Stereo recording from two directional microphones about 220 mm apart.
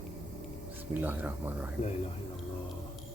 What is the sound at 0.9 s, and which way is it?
Speech, 10° right (ahead or behind).